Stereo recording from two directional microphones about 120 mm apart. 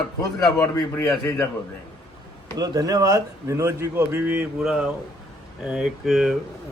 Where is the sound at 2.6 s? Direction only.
30° right (ahead or behind).